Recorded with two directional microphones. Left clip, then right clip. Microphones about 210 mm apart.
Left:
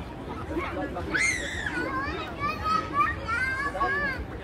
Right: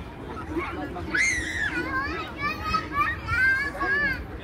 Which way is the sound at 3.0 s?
30° right (ahead or behind).